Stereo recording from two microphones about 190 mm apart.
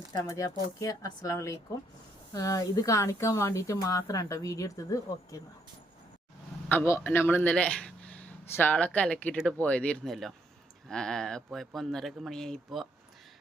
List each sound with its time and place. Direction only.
0.1 s a man's voice: 15° left (ahead or behind)
6.7 s a man's voice: 15° left (ahead or behind)